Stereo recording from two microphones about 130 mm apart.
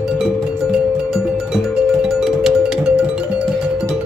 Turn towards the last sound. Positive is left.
turn(degrees=-5)  # may be behind; listen again after turning